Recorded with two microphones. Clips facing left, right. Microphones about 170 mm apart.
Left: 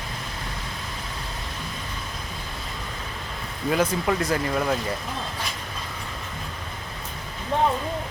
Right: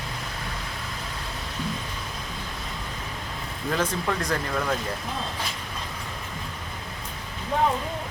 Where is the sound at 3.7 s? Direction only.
10° left (ahead or behind).